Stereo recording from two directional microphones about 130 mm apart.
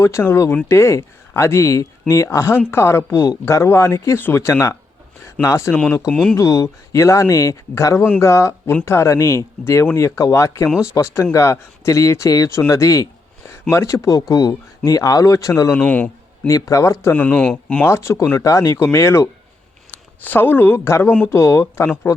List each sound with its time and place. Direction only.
0.0 s speech: 20° left (ahead or behind)
6.1 s speech: 10° left (ahead or behind)
6.3 s speech: 25° left (ahead or behind)
15.7 s a man's voice: 10° left (ahead or behind)
16.5 s speech: 25° left (ahead or behind); by 17.8 s 10° left (ahead or behind)
17.8 s speech: 20° left (ahead or behind)